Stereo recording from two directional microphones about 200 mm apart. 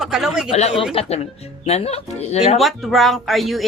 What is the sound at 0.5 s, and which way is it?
Speech, 30° left (ahead or behind).